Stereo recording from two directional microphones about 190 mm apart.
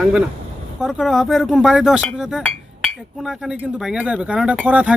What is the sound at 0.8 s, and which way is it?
Speech, centre (ahead or behind).